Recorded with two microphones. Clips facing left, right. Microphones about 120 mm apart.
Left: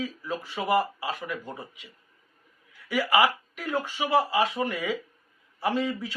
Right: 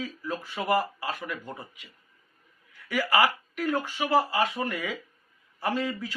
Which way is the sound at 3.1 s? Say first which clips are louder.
Left 1 dB; 15° left (ahead or behind).